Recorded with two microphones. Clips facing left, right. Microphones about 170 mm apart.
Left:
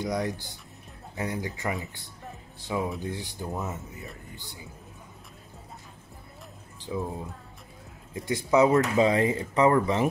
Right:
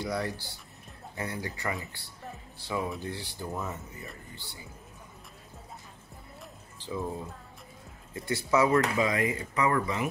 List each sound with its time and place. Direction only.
0.0 s speech: 15° left (ahead or behind)
6.8 s music: 15° left (ahead or behind)
8.1 s speech: 15° left (ahead or behind)
8.9 s speech: 30° left (ahead or behind)